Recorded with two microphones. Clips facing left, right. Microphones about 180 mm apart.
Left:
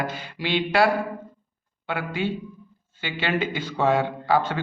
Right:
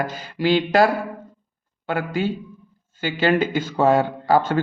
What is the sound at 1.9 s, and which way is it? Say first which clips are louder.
A man's voice: right 4 dB; 45° right (ahead or behind).